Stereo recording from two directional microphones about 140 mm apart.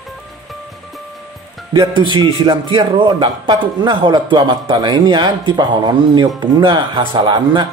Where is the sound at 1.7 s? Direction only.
35° right (ahead or behind).